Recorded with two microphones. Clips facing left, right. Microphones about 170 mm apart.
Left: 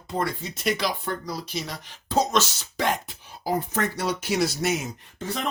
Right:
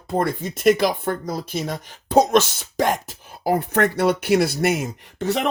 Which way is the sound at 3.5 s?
65° right (ahead or behind).